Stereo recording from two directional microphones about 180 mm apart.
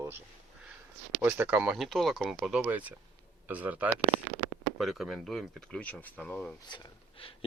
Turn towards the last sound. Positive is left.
turn(degrees=30)  # may be behind; listen again after turning